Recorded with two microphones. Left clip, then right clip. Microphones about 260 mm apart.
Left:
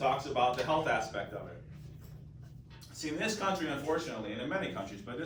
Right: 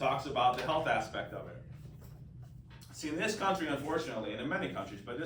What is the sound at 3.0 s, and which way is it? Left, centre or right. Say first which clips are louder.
A man's voice: even; centre.